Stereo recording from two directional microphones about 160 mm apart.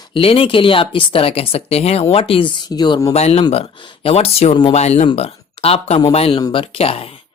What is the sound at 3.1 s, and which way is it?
A woman's voice, 40° left (ahead or behind).